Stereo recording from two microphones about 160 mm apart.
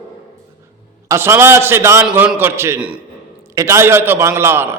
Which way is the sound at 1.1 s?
15° right (ahead or behind).